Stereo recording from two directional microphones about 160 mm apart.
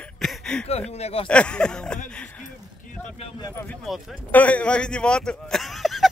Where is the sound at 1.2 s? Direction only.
5° left (ahead or behind).